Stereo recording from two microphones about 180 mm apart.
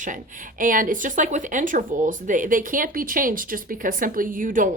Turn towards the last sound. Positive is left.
turn(degrees=-45)  # may be behind; listen again after turning